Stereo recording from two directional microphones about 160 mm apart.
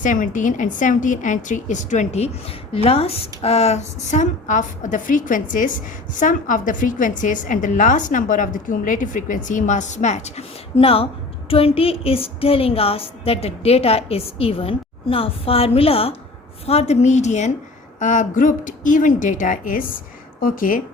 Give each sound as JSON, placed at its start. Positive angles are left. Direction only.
{"t": 0.0, "sound": "a woman's voice", "side_deg": 55}